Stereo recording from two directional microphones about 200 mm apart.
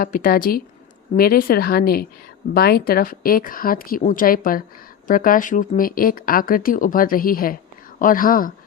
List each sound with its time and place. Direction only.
0.0 s speech: 45° left (ahead or behind)